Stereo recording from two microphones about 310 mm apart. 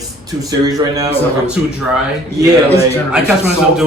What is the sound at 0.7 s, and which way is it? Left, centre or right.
Speech, centre.